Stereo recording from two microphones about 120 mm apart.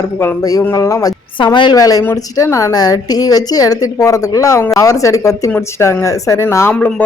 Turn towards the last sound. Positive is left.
turn(degrees=10)  # may be behind; listen again after turning